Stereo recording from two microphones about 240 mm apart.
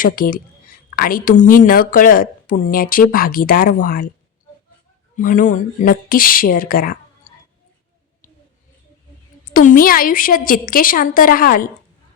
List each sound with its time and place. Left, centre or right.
0.0 s speech: left
5.1 s speech: left
9.4 s speech: left